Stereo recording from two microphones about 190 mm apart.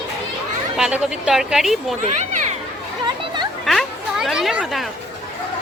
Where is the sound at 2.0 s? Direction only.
35° right (ahead or behind).